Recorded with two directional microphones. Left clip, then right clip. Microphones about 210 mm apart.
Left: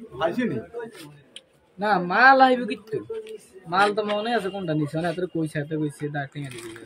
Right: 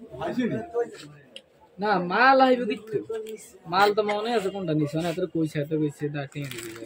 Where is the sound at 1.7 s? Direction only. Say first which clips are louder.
Left 2 dB; 20° left (ahead or behind).